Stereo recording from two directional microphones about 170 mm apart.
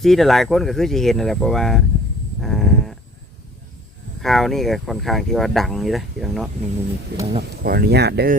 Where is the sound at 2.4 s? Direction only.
Centre (ahead or behind).